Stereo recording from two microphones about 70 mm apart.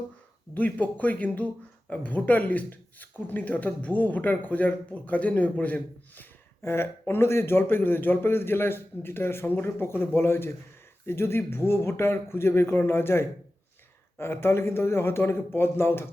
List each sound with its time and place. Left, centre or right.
0.5 s speech: left
6.6 s a man's voice: left